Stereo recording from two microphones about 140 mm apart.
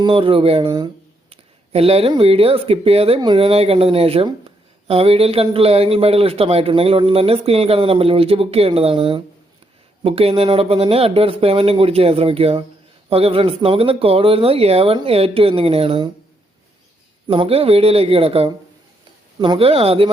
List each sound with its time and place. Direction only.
0.0 s speech: 40° right (ahead or behind)
17.2 s speech: 40° right (ahead or behind)